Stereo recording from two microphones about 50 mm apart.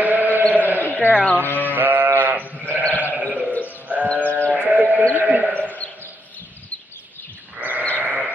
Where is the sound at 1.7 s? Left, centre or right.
Right.